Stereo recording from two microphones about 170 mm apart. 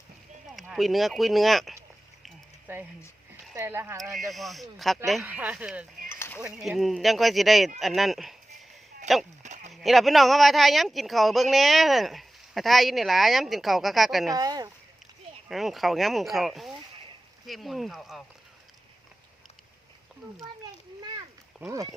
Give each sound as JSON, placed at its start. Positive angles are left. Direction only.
{"t": 0.4, "sound": "speech", "side_deg": 0}
{"t": 3.5, "sound": "speech", "side_deg": -15}
{"t": 4.0, "sound": "speech", "side_deg": 0}
{"t": 6.1, "sound": "a sound", "side_deg": 15}
{"t": 6.4, "sound": "speech", "side_deg": 0}
{"t": 9.4, "sound": "a sound", "side_deg": -45}
{"t": 9.7, "sound": "speech", "side_deg": 0}
{"t": 14.3, "sound": "speech", "side_deg": -20}
{"t": 15.4, "sound": "speech", "side_deg": 0}
{"t": 21.7, "sound": "speech", "side_deg": -20}